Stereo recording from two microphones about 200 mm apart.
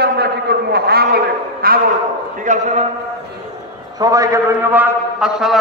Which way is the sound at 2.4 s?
35° right (ahead or behind).